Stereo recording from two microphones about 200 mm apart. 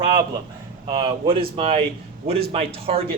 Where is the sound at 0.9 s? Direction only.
25° right (ahead or behind).